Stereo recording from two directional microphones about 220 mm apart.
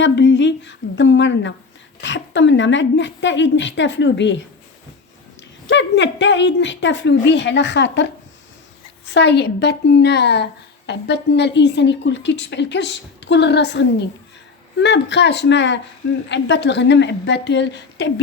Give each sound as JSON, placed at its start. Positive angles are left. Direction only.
{"t": 0.0, "sound": "a woman's voice", "side_deg": 55}
{"t": 5.6, "sound": "a woman's voice", "side_deg": 55}